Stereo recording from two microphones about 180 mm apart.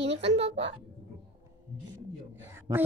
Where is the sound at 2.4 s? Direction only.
10° right (ahead or behind).